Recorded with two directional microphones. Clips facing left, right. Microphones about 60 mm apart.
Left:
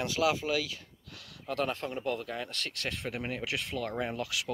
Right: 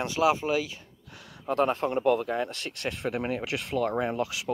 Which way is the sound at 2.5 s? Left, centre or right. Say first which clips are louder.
Right 3 dB; right.